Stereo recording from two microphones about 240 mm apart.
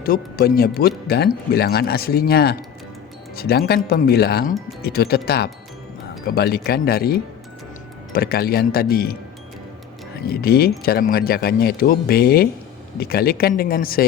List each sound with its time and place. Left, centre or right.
0.0 s speech: left
10.4 s speech: left